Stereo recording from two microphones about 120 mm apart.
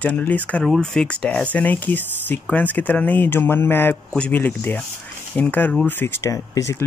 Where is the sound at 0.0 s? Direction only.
10° left (ahead or behind).